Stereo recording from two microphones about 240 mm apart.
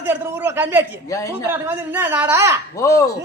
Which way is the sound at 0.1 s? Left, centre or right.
Centre.